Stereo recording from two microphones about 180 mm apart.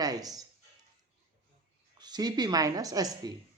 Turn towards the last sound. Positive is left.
turn(degrees=-20)  # may be behind; listen again after turning